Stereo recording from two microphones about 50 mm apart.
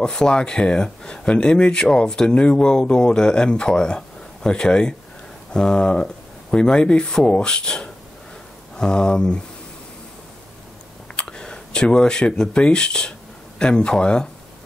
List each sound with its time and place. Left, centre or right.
0.0 s speech: centre
11.1 s speech: centre